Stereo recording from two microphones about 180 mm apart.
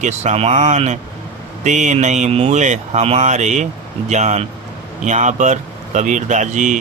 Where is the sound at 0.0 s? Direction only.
40° right (ahead or behind).